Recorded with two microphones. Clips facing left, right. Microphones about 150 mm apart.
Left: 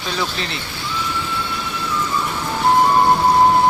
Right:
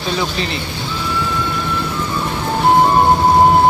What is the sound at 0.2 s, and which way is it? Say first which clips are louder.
Speech: right 4 dB; centre (ahead or behind).